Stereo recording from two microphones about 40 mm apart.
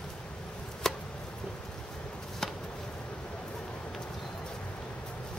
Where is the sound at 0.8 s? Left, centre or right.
Centre.